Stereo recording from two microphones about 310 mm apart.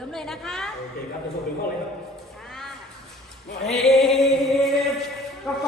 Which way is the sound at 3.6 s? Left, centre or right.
Centre.